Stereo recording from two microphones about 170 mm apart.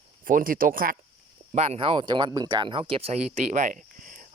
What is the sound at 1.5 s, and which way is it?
Speech, 40° right (ahead or behind).